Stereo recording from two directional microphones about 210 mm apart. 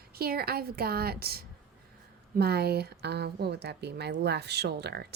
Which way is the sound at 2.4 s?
50° right (ahead or behind).